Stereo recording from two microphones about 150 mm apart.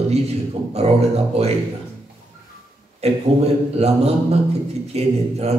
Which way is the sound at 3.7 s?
45° right (ahead or behind).